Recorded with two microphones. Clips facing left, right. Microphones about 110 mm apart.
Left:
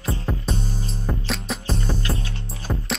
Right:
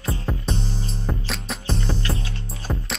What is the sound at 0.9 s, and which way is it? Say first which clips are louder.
Music: left 1 dB; centre (ahead or behind).